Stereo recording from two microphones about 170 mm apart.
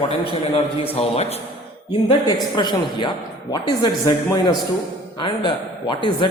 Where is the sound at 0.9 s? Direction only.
40° left (ahead or behind).